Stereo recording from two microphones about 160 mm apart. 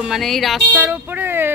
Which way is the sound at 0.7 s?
10° right (ahead or behind).